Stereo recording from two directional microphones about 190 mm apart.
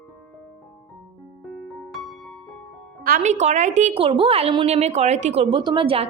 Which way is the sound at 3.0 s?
45° right (ahead or behind).